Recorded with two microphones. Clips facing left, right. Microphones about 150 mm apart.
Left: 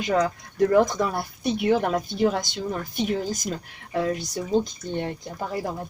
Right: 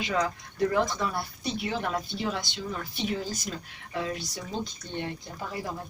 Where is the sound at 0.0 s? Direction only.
45° left (ahead or behind).